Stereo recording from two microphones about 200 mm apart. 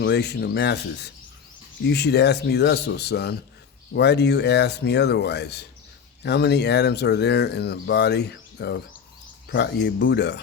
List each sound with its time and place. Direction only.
0.0 s speech: 55° left (ahead or behind)